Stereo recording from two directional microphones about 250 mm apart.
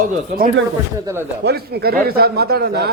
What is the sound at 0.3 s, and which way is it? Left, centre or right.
Speech, right.